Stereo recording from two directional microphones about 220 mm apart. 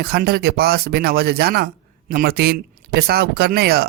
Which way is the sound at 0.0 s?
45° right (ahead or behind).